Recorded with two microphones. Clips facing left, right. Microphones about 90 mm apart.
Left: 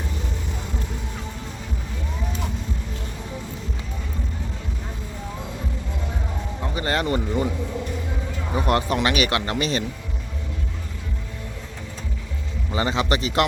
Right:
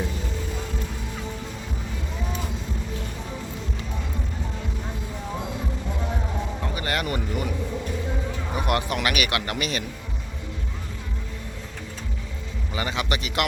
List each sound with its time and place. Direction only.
6.7 s a sound: 30° left (ahead or behind)
8.5 s speech: 30° left (ahead or behind)
12.7 s a man's voice: 30° left (ahead or behind)